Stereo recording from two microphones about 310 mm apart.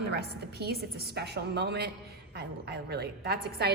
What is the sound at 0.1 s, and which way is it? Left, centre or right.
A woman's voice, right.